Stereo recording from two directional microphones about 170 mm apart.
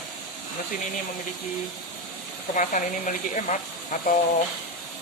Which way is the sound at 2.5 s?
50° left (ahead or behind).